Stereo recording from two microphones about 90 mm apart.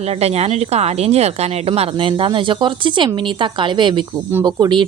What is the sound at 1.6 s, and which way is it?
Speech, 75° right (ahead or behind).